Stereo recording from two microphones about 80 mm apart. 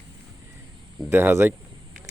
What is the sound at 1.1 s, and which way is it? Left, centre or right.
Speech, right.